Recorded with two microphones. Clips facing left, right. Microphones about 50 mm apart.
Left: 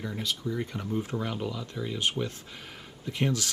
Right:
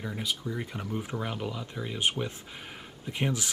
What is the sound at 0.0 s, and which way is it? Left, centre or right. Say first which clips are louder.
Speech: left 1 dB; centre.